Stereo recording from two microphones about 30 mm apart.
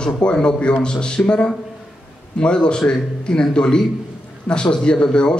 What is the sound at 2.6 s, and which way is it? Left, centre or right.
A man's voice, left.